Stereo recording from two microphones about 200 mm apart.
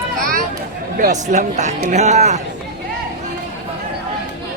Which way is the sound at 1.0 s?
40° right (ahead or behind).